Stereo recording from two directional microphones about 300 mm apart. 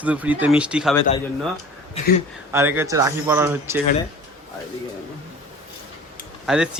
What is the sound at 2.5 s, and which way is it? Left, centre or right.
Speech, centre.